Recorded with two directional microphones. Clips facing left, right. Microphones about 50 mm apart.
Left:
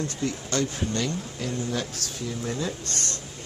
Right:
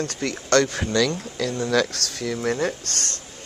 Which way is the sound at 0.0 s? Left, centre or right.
Right.